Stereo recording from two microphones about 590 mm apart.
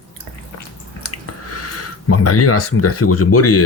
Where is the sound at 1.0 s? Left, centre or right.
Left.